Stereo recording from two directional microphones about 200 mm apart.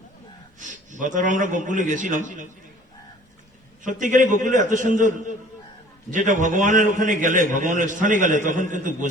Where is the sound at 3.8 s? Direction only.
40° right (ahead or behind).